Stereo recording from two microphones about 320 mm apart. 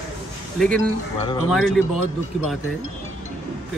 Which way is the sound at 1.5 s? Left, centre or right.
Centre.